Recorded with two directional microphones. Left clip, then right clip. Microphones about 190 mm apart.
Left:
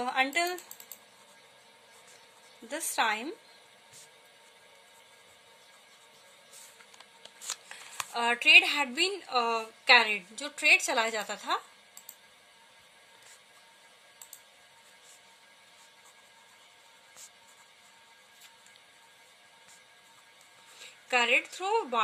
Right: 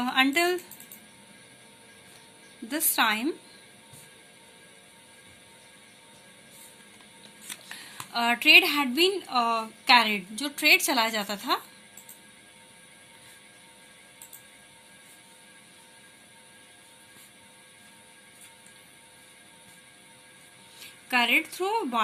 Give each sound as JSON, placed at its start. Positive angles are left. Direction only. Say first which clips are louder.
{"t": 0.0, "sound": "speech", "louder": "right 5 dB", "side_deg": 40}
{"t": 2.6, "sound": "speech", "louder": "right 4 dB", "side_deg": 40}
{"t": 7.7, "sound": "speech", "louder": "right 5 dB", "side_deg": 40}
{"t": 21.1, "sound": "a woman's voice", "louder": "right 2 dB", "side_deg": 45}